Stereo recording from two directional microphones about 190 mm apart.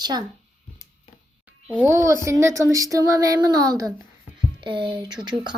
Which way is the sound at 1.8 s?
15° right (ahead or behind).